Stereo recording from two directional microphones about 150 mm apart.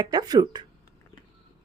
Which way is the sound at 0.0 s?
25° right (ahead or behind).